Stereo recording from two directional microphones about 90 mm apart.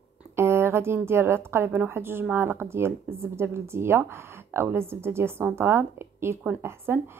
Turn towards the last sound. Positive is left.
turn(degrees=-25)  # may be behind; listen again after turning